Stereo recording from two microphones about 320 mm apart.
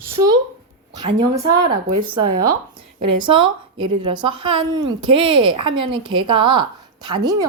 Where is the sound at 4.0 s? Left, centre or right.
Centre.